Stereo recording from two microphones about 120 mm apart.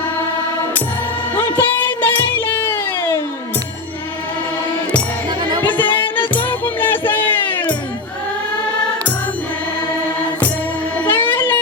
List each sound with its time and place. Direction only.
1.4 s music: 15° left (ahead or behind)
5.6 s music: 15° left (ahead or behind)
10.9 s music: 15° left (ahead or behind)